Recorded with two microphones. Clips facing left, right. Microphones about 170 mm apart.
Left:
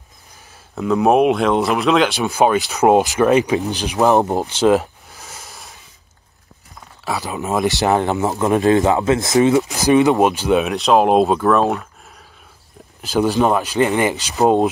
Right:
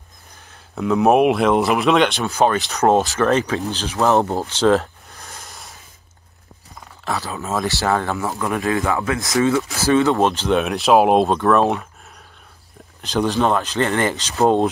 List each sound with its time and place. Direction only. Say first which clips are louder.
0.5 s speech: left 1 dB; centre (ahead or behind)
2.2 s speech: left 2 dB; 15° left (ahead or behind)
7.2 s speech: left 5 dB; 15° left (ahead or behind)
10.6 s speech: right 2 dB; centre (ahead or behind)
13.0 s speech: left 3 dB; 5° left (ahead or behind)